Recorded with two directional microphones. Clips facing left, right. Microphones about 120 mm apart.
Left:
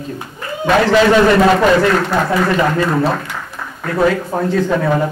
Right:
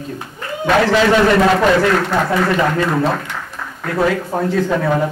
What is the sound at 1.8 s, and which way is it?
A man's voice, 5° left (ahead or behind).